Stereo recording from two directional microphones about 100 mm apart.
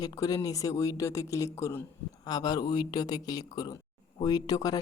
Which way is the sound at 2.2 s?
45° left (ahead or behind).